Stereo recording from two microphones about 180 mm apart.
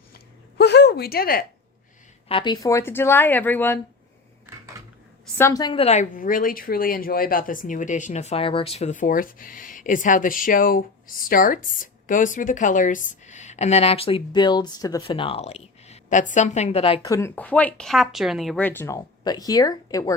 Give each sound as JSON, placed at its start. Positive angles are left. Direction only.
{"t": 0.6, "sound": "a sound", "side_deg": 70}
{"t": 2.3, "sound": "speech", "side_deg": 25}
{"t": 5.4, "sound": "a woman's voice", "side_deg": 20}
{"t": 17.1, "sound": "speech", "side_deg": 15}
{"t": 18.6, "sound": "speech", "side_deg": 10}